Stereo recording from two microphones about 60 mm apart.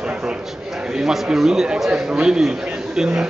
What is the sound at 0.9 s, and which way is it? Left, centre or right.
Speech, centre.